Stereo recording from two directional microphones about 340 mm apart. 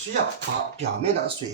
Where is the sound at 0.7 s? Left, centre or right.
Centre.